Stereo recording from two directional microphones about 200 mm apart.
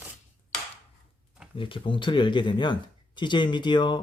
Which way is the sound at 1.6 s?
25° left (ahead or behind).